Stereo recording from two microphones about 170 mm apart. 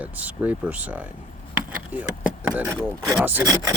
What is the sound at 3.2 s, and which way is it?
Speech, 10° right (ahead or behind).